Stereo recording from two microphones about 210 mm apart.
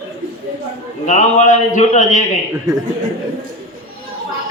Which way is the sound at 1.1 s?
35° left (ahead or behind).